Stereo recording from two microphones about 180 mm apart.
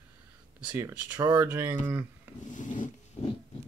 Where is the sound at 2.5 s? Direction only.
45° left (ahead or behind).